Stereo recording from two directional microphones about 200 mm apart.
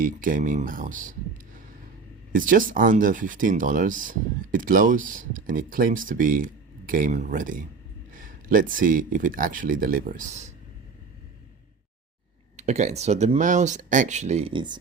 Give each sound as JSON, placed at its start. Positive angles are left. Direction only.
{"t": 0.0, "sound": "speech", "side_deg": -40}
{"t": 2.3, "sound": "speech", "side_deg": -40}
{"t": 12.5, "sound": "speech", "side_deg": -35}